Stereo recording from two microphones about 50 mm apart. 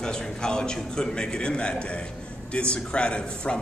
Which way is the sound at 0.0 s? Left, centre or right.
Centre.